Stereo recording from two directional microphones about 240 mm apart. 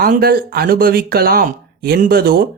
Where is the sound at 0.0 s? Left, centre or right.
Right.